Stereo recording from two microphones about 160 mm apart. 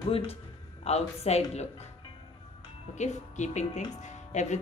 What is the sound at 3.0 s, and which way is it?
Speech, 50° left (ahead or behind).